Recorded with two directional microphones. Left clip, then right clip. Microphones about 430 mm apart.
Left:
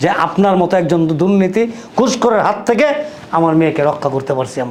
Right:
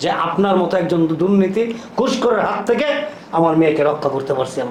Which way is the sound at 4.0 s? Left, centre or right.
Left.